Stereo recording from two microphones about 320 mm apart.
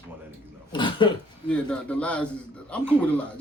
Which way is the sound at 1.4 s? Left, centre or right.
Centre.